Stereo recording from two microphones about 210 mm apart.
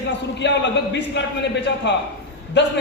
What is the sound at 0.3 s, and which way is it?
A man's voice, 55° left (ahead or behind).